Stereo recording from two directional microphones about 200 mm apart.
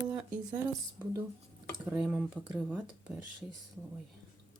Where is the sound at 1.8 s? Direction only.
5° right (ahead or behind).